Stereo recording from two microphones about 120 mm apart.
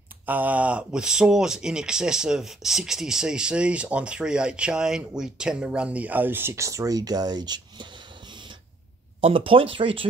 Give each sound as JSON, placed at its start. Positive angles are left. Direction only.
{"t": 0.3, "sound": "speech", "side_deg": -15}
{"t": 9.2, "sound": "speech", "side_deg": -50}